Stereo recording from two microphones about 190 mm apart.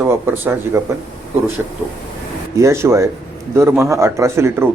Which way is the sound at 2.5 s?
15° right (ahead or behind).